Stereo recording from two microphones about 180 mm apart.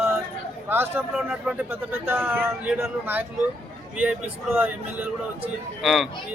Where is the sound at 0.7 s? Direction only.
10° right (ahead or behind).